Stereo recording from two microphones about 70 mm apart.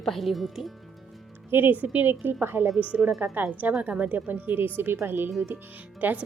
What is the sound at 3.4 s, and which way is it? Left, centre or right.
A woman's voice, right.